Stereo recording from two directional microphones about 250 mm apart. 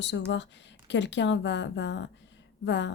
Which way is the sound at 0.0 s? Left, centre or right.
Left.